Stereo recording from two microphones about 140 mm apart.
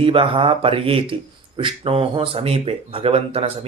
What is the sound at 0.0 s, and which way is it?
A man's voice, 40° right (ahead or behind).